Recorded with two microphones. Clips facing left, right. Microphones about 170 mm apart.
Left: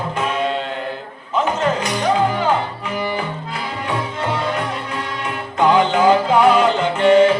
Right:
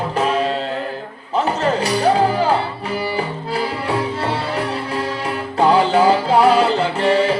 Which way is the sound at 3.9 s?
35° right (ahead or behind).